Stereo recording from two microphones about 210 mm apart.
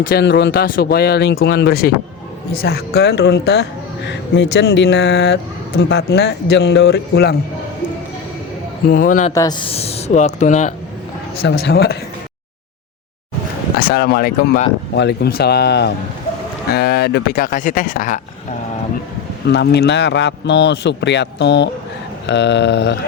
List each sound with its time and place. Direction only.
0.1 s speech: 50° left (ahead or behind)
8.9 s speech: 40° left (ahead or behind)
9.3 s speech: 20° left (ahead or behind); by 10.8 s 35° left (ahead or behind)
11.4 s speech: 50° left (ahead or behind)
13.7 s speech: 50° left (ahead or behind)
19.5 s a man's voice: 55° left (ahead or behind)